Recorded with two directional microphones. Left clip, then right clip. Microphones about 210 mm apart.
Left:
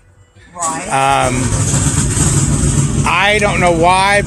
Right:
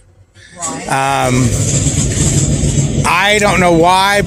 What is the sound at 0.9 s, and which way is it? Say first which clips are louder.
Speech: left 1 dB; 45° right (ahead or behind).